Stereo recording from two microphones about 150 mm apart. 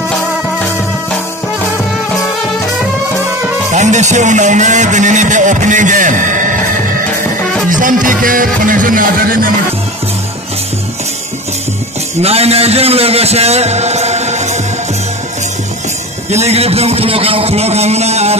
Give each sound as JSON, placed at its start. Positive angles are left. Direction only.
{"t": 3.7, "sound": "speech", "side_deg": -50}
{"t": 7.7, "sound": "music", "side_deg": -60}
{"t": 12.2, "sound": "a man's voice", "side_deg": -45}
{"t": 16.3, "sound": "a man's voice", "side_deg": -45}